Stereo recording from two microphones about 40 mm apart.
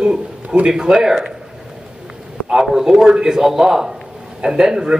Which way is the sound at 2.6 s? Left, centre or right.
Centre.